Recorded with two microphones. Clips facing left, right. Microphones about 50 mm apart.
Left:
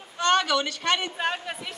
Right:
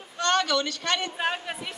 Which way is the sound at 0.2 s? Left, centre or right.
Centre.